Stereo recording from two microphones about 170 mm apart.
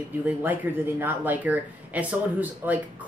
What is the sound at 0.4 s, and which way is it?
Speech, 10° right (ahead or behind).